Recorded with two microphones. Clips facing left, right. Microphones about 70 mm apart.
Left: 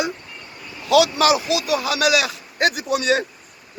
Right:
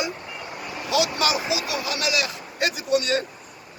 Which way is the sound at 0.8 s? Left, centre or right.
Left.